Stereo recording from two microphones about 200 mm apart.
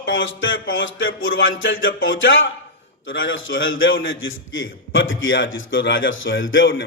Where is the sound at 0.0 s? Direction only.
75° left (ahead or behind).